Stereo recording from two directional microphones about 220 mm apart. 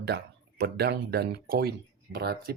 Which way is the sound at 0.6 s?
45° right (ahead or behind).